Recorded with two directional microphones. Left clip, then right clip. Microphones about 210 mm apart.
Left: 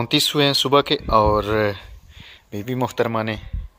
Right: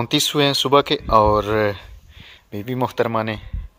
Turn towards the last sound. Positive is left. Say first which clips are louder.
# right 1 dB
turn(degrees=0)  # may be behind; listen again after turning